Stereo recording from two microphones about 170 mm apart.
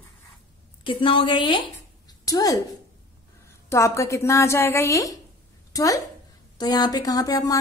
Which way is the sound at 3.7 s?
15° left (ahead or behind).